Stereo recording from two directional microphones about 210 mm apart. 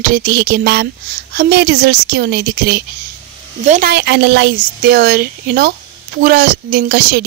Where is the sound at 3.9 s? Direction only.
55° right (ahead or behind).